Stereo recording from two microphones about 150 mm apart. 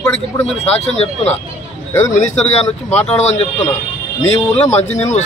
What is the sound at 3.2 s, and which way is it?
Speech, 50° left (ahead or behind).